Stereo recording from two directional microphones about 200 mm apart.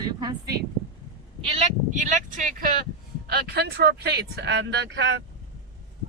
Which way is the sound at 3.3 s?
55° right (ahead or behind).